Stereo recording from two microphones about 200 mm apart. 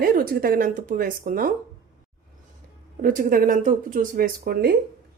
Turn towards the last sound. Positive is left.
turn(degrees=-45)  # may be behind; listen again after turning